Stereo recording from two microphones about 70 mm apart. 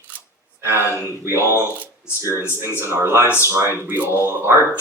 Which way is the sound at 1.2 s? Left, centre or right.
Right.